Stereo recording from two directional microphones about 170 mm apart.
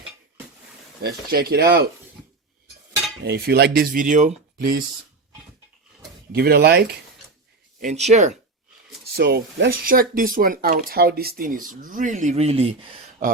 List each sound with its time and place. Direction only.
1.0 s speech: 65° right (ahead or behind)
3.2 s speech: 70° right (ahead or behind)
6.3 s speech: 65° right (ahead or behind)
7.8 s speech: 45° right (ahead or behind)
9.1 s speech: 70° right (ahead or behind); by 13.0 s 35° right (ahead or behind)
13.2 s speech: 55° right (ahead or behind)